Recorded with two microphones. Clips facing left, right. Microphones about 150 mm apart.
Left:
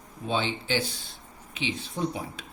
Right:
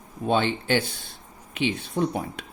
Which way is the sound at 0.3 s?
55° right (ahead or behind).